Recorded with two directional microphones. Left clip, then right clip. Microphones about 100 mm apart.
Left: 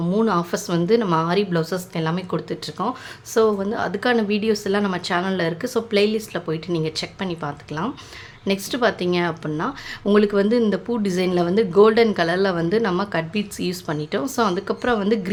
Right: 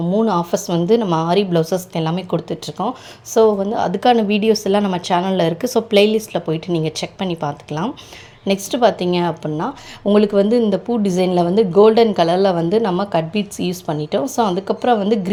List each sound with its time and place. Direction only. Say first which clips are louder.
0.0 s a woman's voice: right 4 dB; 15° right (ahead or behind)
0.3 s a woman's voice: right 4 dB; 30° right (ahead or behind)
5.4 s speech: right 6 dB; 45° right (ahead or behind)
8.4 s speech: right 5 dB; 30° right (ahead or behind)